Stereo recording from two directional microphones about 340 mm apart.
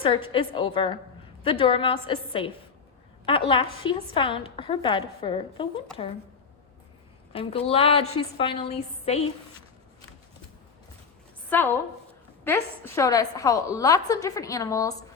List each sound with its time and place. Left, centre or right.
0.0 s a woman's voice: centre
7.3 s a woman's voice: centre
11.4 s a woman's voice: centre